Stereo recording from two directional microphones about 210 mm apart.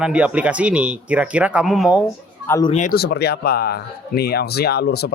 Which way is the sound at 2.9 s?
50° left (ahead or behind).